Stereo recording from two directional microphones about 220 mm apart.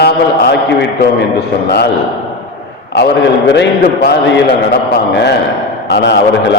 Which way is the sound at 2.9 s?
50° left (ahead or behind).